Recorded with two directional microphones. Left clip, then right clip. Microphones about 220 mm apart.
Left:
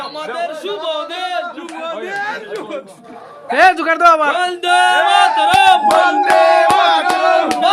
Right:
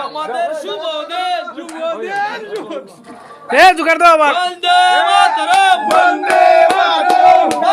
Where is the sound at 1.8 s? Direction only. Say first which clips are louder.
Right 4 dB; 15° left (ahead or behind).